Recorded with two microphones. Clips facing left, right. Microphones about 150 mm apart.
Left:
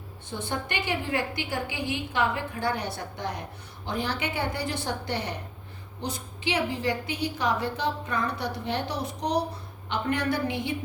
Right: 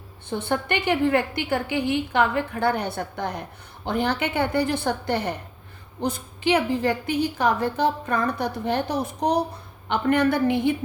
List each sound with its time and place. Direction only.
0.3 s a woman's voice: 60° right (ahead or behind)